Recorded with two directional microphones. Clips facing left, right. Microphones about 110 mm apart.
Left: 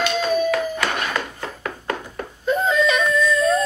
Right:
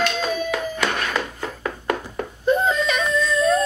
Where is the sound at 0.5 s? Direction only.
15° right (ahead or behind).